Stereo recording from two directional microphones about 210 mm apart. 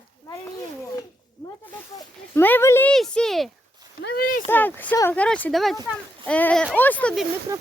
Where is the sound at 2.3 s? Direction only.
10° left (ahead or behind).